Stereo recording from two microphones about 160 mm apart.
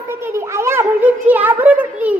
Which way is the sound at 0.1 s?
15° right (ahead or behind).